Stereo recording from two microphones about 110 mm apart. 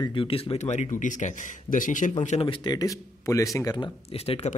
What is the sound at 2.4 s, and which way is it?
Speech, 45° left (ahead or behind).